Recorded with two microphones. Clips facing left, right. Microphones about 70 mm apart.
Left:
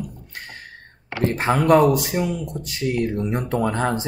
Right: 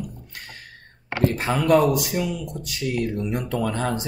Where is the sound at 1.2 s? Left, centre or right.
Left.